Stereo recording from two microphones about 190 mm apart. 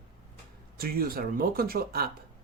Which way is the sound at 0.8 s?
50° right (ahead or behind).